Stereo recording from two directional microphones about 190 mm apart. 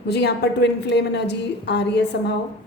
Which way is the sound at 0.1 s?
60° left (ahead or behind).